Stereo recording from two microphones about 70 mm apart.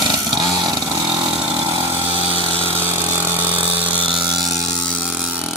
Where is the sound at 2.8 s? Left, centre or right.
Right.